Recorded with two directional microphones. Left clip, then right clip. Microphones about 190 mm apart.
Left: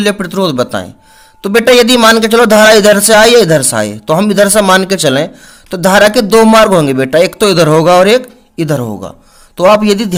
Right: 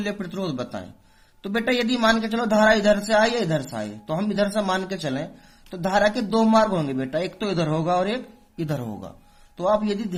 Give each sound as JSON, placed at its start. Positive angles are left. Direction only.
{"t": 0.0, "sound": "a man's voice", "side_deg": 45}
{"t": 9.6, "sound": "a man's voice", "side_deg": 50}